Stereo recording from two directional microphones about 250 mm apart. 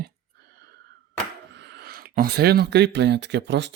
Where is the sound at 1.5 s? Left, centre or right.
Right.